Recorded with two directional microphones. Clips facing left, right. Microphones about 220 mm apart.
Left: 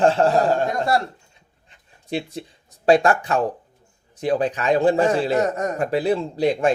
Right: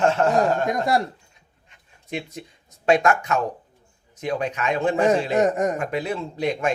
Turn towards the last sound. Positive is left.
turn(degrees=35)  # may be behind; listen again after turning